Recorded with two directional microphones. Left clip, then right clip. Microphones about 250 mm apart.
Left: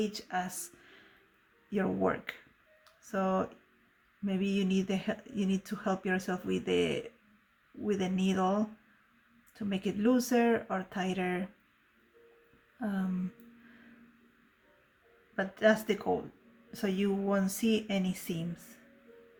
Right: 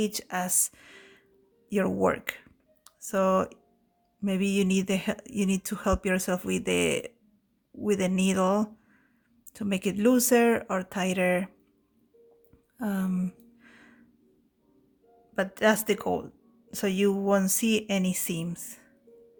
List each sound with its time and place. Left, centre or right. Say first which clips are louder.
0.0 s speech: right 4 dB; right
12.8 s speech: right 5 dB; right
15.4 s speech: right 3 dB; right